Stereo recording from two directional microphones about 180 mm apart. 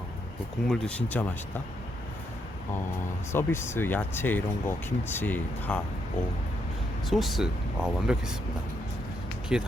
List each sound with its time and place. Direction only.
0.7 s speech: 5° left (ahead or behind)
3.3 s speech: 15° left (ahead or behind)
7.1 s speech: centre (ahead or behind)
9.5 s speech: 5° right (ahead or behind)